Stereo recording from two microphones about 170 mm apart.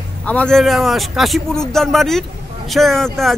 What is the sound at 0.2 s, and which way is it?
A man's voice, 5° left (ahead or behind).